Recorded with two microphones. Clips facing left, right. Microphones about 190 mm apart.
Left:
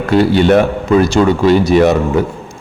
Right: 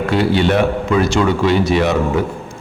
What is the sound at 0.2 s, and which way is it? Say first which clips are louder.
A man's voice: left 5 dB; 45° left (ahead or behind).